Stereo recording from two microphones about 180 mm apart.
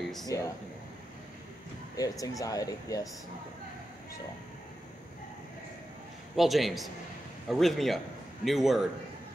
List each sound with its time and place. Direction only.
0.0 s a sound: centre (ahead or behind)
2.0 s speech: 20° left (ahead or behind)
6.3 s a man's voice: centre (ahead or behind)